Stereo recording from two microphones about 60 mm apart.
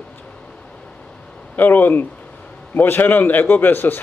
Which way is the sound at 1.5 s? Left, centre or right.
Left.